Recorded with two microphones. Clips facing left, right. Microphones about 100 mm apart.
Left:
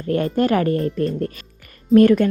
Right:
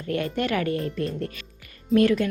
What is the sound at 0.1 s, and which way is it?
A woman's voice, 40° left (ahead or behind).